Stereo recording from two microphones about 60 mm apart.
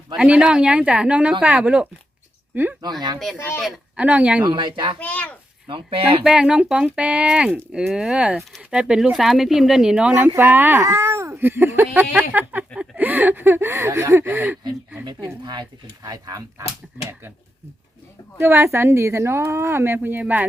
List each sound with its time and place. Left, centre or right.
0.2 s a woman's voice: centre
2.5 s speech: right
2.9 s speech: centre
3.3 s speech: left
3.9 s a woman's voice: right
4.9 s speech: left
6.2 s a woman's voice: centre
9.1 s speech: centre; by 10.3 s right
10.3 s speech: right
10.8 s a woman's voice: right
16.0 s speech: right
18.3 s speech: right